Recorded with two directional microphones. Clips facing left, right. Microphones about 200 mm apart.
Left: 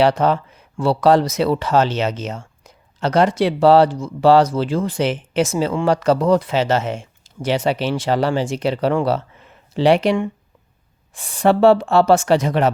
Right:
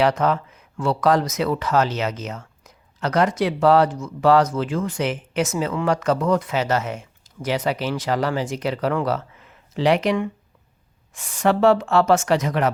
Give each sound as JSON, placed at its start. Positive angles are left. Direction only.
{"t": 0.0, "sound": "speech", "side_deg": 30}